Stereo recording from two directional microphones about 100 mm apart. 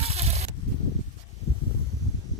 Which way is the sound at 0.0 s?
90° right.